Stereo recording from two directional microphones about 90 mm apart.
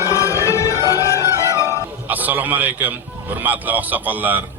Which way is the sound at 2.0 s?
20° right (ahead or behind).